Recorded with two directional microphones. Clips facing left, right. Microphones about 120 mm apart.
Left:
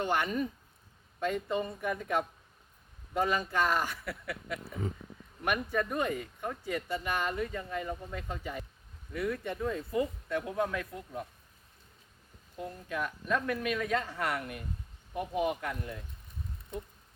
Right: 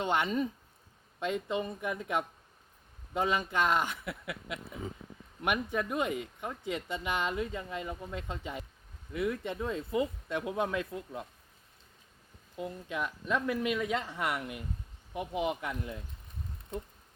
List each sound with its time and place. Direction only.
0.0 s speech: 20° right (ahead or behind)
3.2 s speech: 20° right (ahead or behind)
12.5 s speech: 15° right (ahead or behind)